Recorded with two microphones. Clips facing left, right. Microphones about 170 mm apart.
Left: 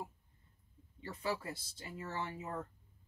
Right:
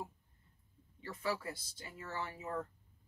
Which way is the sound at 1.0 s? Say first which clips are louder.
Even; 25° left (ahead or behind).